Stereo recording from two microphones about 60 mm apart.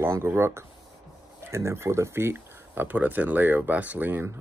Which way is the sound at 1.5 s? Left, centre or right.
Right.